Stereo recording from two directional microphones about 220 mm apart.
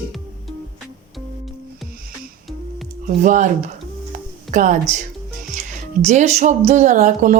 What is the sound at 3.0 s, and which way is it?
Speech, 35° right (ahead or behind).